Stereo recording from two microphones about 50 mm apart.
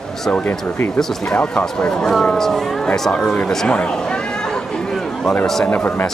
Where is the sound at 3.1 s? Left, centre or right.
Left.